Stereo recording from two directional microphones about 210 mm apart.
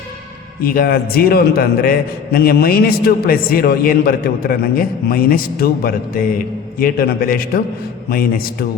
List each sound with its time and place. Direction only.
0.6 s a man's voice: 45° left (ahead or behind)